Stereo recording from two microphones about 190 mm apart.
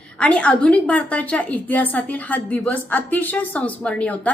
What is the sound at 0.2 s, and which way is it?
A woman's voice, 5° left (ahead or behind).